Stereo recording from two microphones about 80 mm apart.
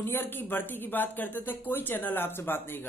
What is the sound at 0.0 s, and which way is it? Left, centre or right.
Speech, left.